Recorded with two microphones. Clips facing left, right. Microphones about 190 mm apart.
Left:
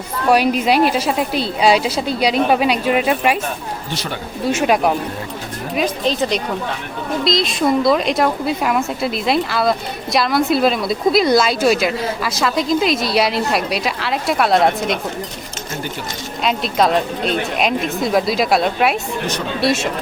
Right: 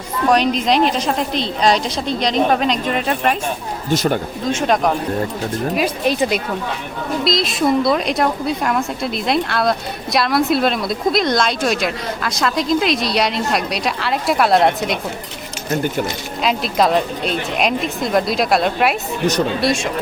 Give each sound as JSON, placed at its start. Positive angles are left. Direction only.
{"t": 0.3, "sound": "a woman's voice", "side_deg": 10}
{"t": 3.8, "sound": "speech", "side_deg": -45}
{"t": 4.4, "sound": "a woman's voice", "side_deg": 10}
{"t": 5.7, "sound": "a woman's voice", "side_deg": -10}
{"t": 16.4, "sound": "a woman's voice", "side_deg": 0}